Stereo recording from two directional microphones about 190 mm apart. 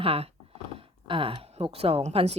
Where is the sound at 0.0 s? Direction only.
30° right (ahead or behind).